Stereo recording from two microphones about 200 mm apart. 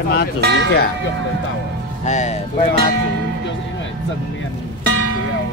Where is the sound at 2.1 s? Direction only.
35° left (ahead or behind).